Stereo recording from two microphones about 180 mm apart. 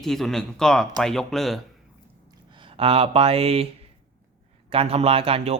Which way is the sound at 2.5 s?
30° right (ahead or behind).